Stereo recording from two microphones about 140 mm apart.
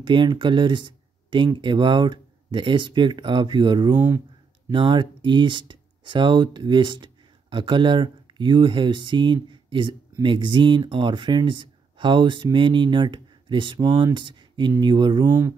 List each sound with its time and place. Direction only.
0.0 s speech: 35° right (ahead or behind)
3.9 s speech: 15° right (ahead or behind)
4.6 s speech: 35° right (ahead or behind)
15.2 s speech: 15° right (ahead or behind)